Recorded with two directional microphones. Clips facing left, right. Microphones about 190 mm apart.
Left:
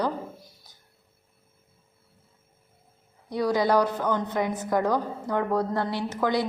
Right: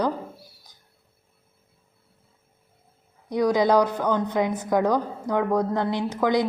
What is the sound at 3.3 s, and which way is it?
A woman's voice, 15° right (ahead or behind).